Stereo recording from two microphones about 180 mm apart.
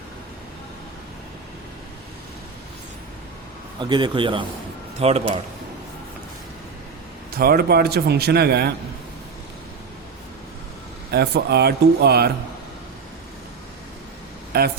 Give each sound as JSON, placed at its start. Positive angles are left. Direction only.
{"t": 3.8, "sound": "a man's voice", "side_deg": -25}
{"t": 7.3, "sound": "a man's voice", "side_deg": -55}
{"t": 11.1, "sound": "a man's voice", "side_deg": -65}
{"t": 14.5, "sound": "a man's voice", "side_deg": -60}